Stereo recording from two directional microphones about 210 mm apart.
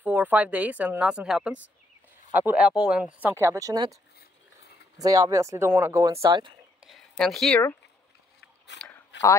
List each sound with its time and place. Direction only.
0.0 s a woman's voice: 10° right (ahead or behind)
6.8 s speech: centre (ahead or behind)
8.7 s speech: 55° left (ahead or behind)